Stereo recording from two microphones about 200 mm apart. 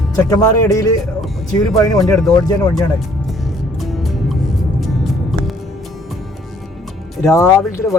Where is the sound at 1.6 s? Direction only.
Centre (ahead or behind).